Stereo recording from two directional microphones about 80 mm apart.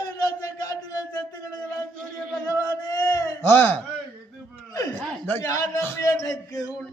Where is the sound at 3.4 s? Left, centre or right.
Left.